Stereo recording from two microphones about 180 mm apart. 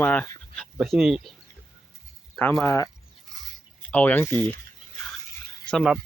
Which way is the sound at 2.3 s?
10° left (ahead or behind).